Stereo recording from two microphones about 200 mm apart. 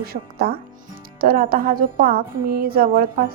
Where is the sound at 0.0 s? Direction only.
50° right (ahead or behind).